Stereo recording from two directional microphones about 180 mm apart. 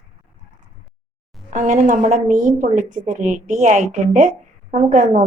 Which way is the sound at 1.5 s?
45° right (ahead or behind).